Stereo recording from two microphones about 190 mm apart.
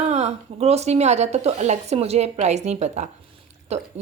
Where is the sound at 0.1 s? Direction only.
35° right (ahead or behind).